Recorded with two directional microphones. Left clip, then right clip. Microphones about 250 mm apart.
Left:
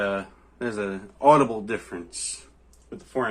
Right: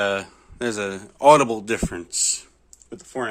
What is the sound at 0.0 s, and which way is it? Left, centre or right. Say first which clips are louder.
Speech: right 4 dB; right.